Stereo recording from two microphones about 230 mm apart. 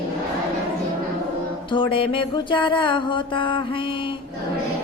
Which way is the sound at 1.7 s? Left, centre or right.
Left.